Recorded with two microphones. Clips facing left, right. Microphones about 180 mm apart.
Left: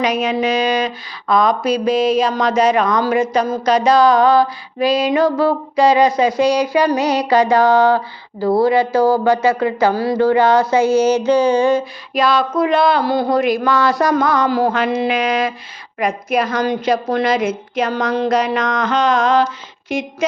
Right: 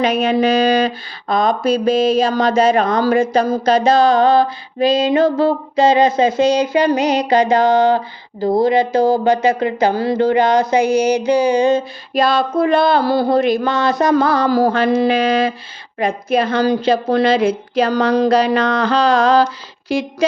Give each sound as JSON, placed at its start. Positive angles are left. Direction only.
{"t": 0.0, "sound": "female singing", "side_deg": -30}
{"t": 12.1, "sound": "female singing", "side_deg": -30}
{"t": 16.0, "sound": "a woman's voice", "side_deg": -25}